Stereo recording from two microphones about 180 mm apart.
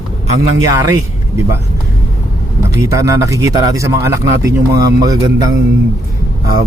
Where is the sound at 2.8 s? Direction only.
15° right (ahead or behind).